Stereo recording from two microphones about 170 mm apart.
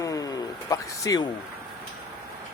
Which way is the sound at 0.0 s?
20° left (ahead or behind).